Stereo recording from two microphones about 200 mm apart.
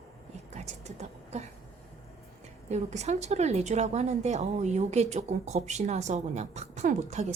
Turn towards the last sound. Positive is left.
turn(degrees=-35)  # may be behind; listen again after turning